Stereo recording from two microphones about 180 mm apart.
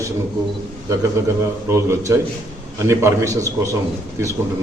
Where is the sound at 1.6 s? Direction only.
15° right (ahead or behind).